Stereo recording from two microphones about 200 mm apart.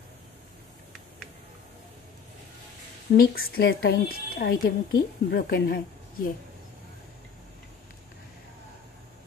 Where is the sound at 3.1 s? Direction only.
50° left (ahead or behind).